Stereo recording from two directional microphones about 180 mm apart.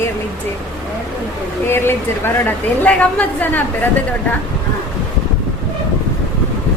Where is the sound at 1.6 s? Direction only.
15° left (ahead or behind).